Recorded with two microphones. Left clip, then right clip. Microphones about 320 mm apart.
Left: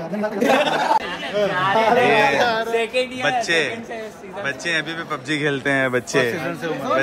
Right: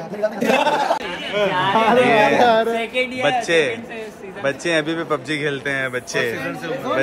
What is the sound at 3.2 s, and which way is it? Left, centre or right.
A man's voice, centre.